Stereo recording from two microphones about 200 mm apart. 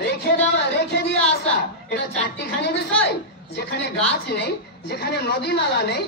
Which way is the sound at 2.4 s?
55° left (ahead or behind).